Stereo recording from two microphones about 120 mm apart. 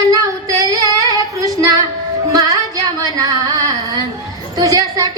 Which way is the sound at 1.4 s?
30° right (ahead or behind).